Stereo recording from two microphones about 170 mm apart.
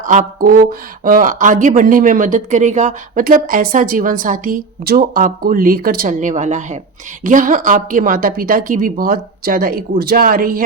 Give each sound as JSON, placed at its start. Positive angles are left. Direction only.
{"t": 0.0, "sound": "a woman's voice", "side_deg": -50}